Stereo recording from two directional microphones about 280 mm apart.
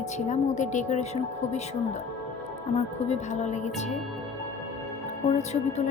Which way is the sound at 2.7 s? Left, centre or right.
Left.